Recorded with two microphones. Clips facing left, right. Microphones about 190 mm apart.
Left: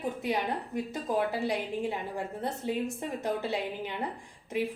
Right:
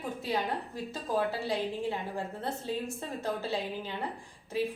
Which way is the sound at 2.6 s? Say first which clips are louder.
Left 3 dB; 20° left (ahead or behind).